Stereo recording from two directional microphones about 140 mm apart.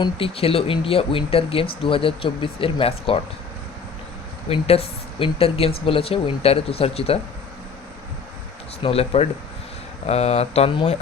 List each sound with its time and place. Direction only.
0.0 s speech: 40° left (ahead or behind)
4.4 s speech: 45° left (ahead or behind)
8.8 s speech: 45° left (ahead or behind)